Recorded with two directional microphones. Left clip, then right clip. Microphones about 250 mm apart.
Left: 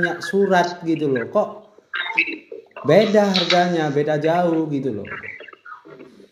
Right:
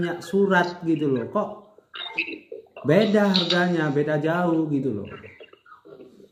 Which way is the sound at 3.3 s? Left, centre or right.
Left.